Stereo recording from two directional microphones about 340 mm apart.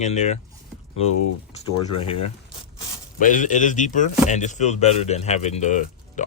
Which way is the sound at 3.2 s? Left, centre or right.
Left.